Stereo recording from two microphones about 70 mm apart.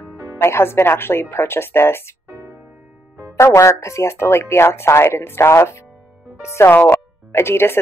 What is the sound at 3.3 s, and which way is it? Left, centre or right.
Speech, left.